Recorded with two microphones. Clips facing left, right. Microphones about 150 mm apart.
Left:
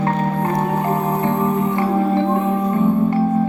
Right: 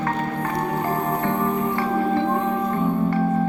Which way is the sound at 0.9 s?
20° left (ahead or behind).